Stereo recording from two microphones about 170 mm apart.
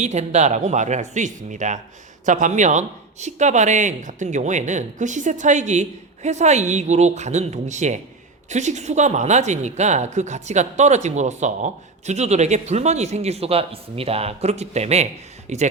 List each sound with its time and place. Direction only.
0.0 s speech: 40° right (ahead or behind)